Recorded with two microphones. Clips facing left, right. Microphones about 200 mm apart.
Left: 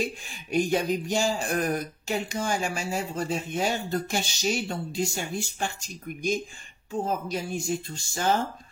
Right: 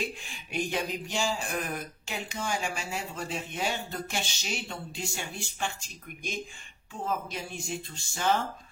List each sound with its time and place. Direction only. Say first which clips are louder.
0.0 s speech: left 5 dB; 45° left (ahead or behind)